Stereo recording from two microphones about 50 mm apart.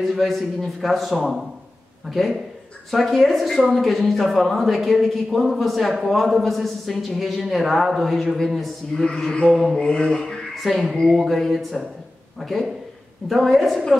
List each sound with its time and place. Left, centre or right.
0.0 s a woman's voice: centre
9.0 s mantra: centre
9.5 s a woman's voice: centre
9.8 s mantra: centre
10.5 s a woman's voice: centre